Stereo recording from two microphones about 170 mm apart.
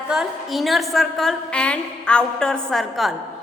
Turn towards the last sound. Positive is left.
turn(degrees=0)  # may be behind; listen again after turning